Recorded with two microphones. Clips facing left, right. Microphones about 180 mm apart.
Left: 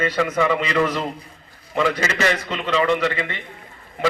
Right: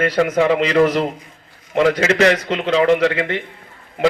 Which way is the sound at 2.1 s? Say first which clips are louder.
Right 7 dB; 60° right (ahead or behind).